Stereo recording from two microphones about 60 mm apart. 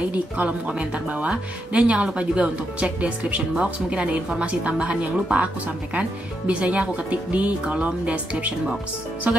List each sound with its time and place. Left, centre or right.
0.1 s speech: right